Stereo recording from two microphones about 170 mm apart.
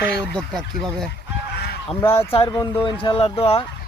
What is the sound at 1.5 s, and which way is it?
Honk, 70° left (ahead or behind).